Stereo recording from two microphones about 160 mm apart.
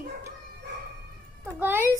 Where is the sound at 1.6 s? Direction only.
15° right (ahead or behind).